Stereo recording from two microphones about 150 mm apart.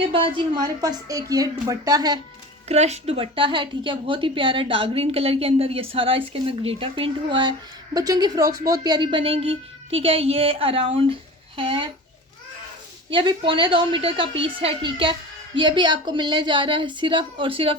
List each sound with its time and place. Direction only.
0.1 s a woman's voice: 35° right (ahead or behind)
2.6 s a woman's voice: 45° right (ahead or behind)
13.1 s a woman's voice: 35° right (ahead or behind)